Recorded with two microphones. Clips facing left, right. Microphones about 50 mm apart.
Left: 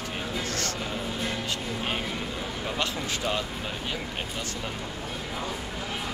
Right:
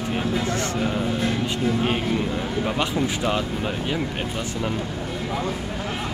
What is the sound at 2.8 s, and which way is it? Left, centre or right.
Speech, right.